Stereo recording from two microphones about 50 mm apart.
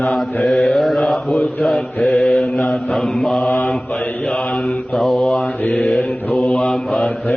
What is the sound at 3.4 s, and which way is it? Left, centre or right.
Mantra, left.